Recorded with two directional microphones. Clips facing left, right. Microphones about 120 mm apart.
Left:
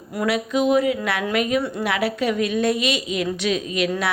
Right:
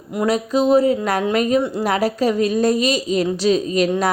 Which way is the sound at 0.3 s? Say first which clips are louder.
Right 3 dB; 35° right (ahead or behind).